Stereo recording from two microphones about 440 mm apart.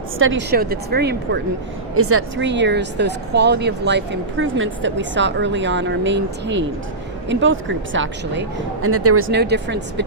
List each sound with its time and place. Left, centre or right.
0.2 s speech: right